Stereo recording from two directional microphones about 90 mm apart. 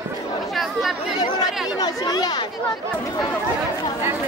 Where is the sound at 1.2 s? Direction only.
50° left (ahead or behind).